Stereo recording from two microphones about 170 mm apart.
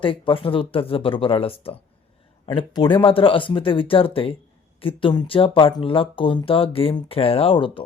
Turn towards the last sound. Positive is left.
turn(degrees=30)  # may be behind; listen again after turning